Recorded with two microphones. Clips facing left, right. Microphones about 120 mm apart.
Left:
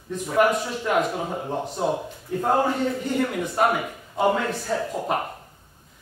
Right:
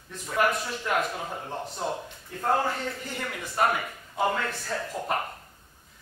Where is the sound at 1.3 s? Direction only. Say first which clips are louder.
Left 6 dB; 15° left (ahead or behind).